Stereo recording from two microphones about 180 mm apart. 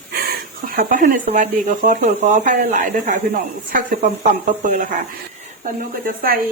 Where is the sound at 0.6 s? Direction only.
50° right (ahead or behind).